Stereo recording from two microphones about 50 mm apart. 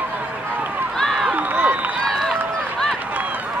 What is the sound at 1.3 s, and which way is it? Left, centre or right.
Run, right.